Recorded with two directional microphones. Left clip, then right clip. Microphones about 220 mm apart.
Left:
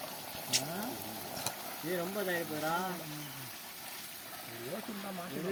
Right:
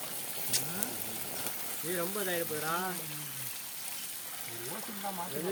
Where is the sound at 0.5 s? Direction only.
25° right (ahead or behind).